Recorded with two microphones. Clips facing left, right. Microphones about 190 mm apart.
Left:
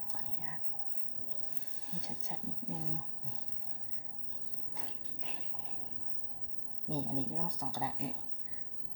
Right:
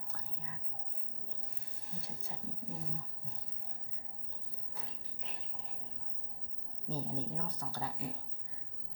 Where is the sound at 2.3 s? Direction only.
20° left (ahead or behind).